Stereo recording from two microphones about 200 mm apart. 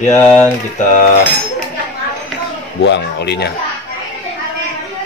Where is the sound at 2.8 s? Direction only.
60° left (ahead or behind).